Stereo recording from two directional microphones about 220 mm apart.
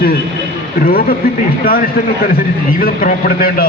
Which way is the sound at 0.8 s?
40° left (ahead or behind).